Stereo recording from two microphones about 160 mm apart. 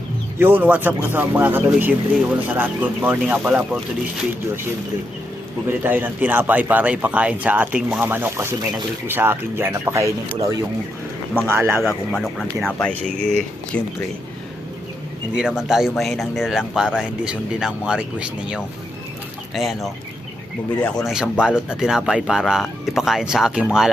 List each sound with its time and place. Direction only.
0.3 s a man's voice: 15° right (ahead or behind)
5.6 s a man's voice: 10° right (ahead or behind)
11.8 s speech: centre (ahead or behind)
15.4 s speech: 5° right (ahead or behind)
21.1 s speech: 5° right (ahead or behind)